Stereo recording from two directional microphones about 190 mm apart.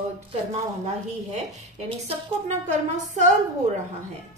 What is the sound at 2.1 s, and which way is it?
A woman's voice, 40° right (ahead or behind).